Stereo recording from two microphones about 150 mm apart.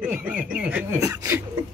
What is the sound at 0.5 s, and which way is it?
Speech, 10° right (ahead or behind).